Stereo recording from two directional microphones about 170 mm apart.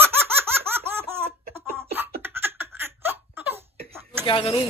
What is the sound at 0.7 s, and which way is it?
Laughter, 15° right (ahead or behind).